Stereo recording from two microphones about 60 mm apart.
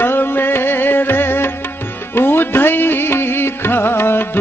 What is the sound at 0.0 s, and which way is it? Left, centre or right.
Music, left.